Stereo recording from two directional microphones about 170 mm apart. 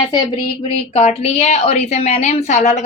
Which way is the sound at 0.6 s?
40° left (ahead or behind).